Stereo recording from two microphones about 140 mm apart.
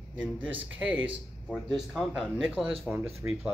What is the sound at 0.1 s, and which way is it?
Speech, 10° right (ahead or behind).